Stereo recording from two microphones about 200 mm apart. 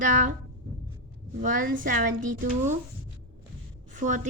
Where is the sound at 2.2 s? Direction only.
40° right (ahead or behind).